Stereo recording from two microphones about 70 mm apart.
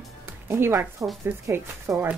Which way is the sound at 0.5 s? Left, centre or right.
Right.